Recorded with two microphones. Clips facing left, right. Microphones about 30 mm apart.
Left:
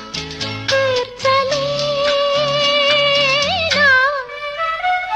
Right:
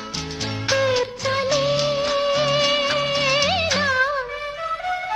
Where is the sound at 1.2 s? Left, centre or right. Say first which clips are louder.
Left 8 dB; left.